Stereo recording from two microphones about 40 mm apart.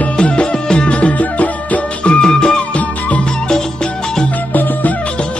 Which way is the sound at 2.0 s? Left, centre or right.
Left.